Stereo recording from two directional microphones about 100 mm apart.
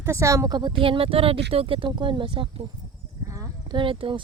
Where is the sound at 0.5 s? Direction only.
55° right (ahead or behind).